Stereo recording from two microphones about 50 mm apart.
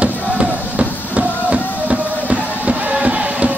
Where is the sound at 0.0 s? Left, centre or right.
Right.